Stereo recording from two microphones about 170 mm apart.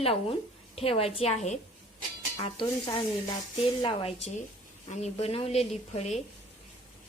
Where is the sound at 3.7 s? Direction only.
30° left (ahead or behind).